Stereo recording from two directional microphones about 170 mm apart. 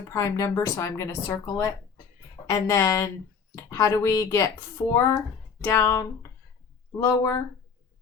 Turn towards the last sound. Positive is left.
turn(degrees=20)  # may be behind; listen again after turning